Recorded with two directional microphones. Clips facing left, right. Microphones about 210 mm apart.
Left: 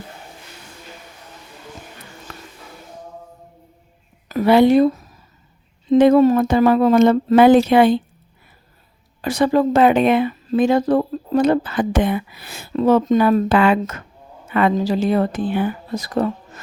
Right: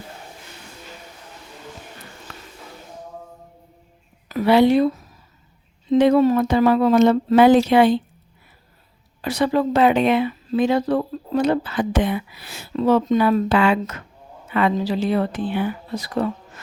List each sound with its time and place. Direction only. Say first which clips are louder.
4.3 s speech: left 2 dB; 45° left (ahead or behind)
5.9 s speech: left 3 dB; 50° left (ahead or behind)
9.2 s speech: left 3 dB; 45° left (ahead or behind)